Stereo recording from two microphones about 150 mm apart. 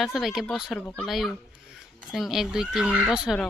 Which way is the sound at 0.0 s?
Centre (ahead or behind).